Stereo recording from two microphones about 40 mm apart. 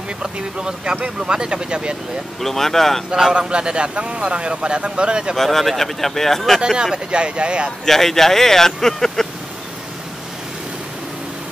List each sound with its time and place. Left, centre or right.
0.2 s speech: right
2.4 s speech: centre
3.1 s a man's voice: centre
5.3 s speech: centre
6.8 s speech: right
7.8 s speech: centre